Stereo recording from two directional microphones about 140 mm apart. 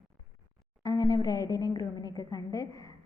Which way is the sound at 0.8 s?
25° left (ahead or behind).